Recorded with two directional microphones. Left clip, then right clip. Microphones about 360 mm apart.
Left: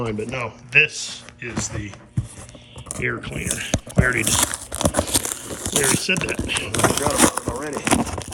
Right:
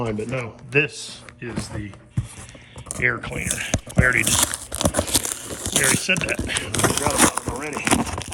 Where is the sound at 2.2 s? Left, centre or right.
Centre.